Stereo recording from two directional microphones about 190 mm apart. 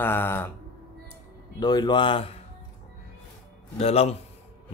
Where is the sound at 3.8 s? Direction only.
35° left (ahead or behind).